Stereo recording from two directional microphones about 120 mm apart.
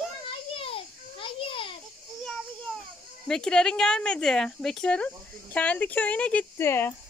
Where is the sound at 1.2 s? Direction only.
45° left (ahead or behind).